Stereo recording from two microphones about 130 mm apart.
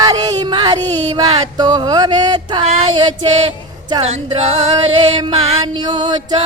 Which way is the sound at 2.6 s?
55° right (ahead or behind).